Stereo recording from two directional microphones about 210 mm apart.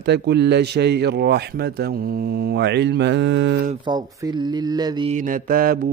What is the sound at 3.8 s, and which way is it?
Speech, 20° right (ahead or behind).